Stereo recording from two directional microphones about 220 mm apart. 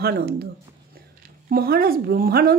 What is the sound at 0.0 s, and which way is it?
Speech, 45° right (ahead or behind).